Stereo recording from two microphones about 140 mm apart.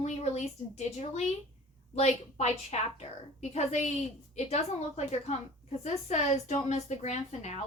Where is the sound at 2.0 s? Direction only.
50° left (ahead or behind).